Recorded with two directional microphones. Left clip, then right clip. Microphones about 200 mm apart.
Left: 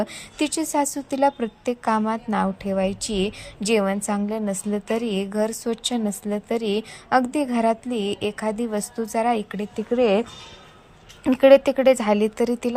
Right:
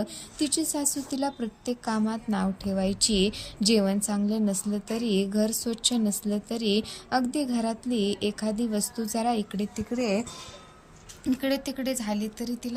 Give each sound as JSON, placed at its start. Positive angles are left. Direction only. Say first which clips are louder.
{"t": 0.0, "sound": "a woman's voice", "louder": "left 6 dB", "side_deg": 10}
{"t": 11.3, "sound": "speech", "louder": "left 15 dB", "side_deg": 20}